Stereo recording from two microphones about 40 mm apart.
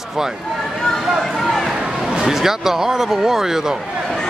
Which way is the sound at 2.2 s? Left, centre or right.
Centre.